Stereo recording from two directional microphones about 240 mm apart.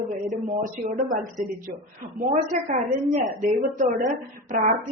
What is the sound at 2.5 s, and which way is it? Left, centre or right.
Speech, right.